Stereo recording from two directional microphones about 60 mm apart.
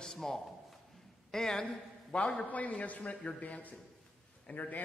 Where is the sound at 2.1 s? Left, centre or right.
Centre.